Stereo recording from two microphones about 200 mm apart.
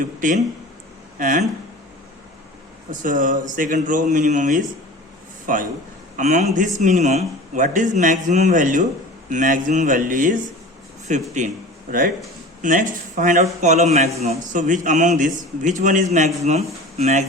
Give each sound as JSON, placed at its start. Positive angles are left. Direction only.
{"t": 0.0, "sound": "a man's voice", "side_deg": -40}
{"t": 2.9, "sound": "a man's voice", "side_deg": -40}